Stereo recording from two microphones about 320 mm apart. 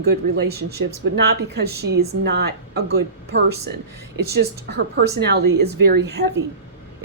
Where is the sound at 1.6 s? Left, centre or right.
Right.